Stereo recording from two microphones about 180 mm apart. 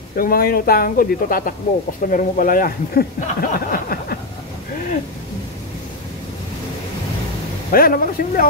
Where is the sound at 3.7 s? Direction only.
55° left (ahead or behind).